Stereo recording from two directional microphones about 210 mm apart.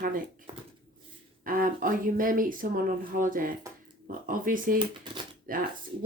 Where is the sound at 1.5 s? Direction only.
40° right (ahead or behind).